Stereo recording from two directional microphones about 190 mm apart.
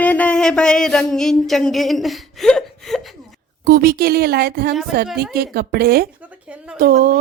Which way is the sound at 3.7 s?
50° right (ahead or behind).